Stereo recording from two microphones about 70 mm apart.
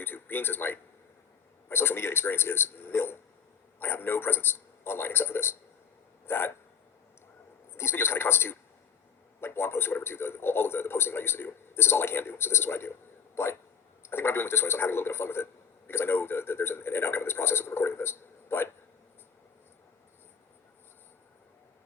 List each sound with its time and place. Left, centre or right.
0.0 s a man's voice: left
6.2 s hiccup: left
7.8 s a man's voice: left